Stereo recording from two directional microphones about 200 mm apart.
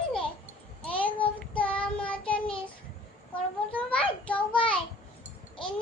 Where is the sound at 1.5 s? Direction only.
5° left (ahead or behind).